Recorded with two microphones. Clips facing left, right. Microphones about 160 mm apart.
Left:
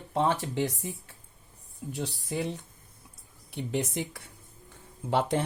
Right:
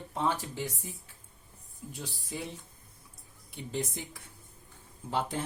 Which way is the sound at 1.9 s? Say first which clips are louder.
Left 8 dB; 75° left (ahead or behind).